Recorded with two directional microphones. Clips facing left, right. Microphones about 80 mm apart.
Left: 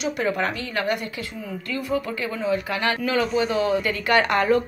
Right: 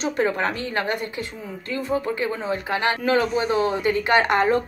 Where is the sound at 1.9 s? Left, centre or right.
Right.